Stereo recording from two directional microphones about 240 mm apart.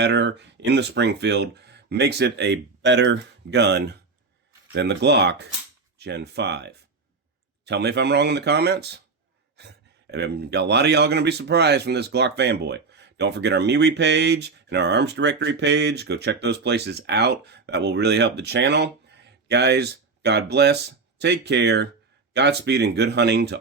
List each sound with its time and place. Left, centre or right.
0.0 s speech: right